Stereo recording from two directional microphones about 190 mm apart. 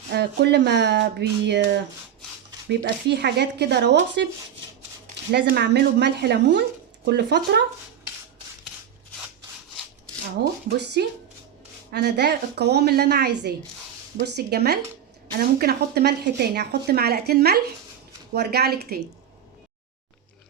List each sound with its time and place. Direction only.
0.1 s speech: 65° right (ahead or behind)
10.4 s speech: 60° right (ahead or behind)